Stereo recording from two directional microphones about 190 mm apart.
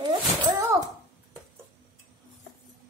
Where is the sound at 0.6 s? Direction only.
20° right (ahead or behind).